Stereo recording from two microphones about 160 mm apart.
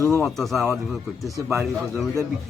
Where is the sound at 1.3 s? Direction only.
15° right (ahead or behind).